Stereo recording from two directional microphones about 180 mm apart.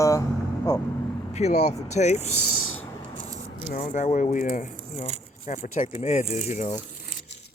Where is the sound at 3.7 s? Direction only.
45° left (ahead or behind).